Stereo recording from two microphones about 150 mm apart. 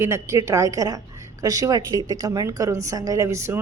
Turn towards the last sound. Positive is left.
turn(degrees=-20)  # may be behind; listen again after turning